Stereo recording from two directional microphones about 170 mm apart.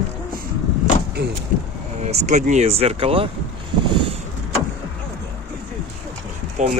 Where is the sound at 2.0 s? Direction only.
40° right (ahead or behind).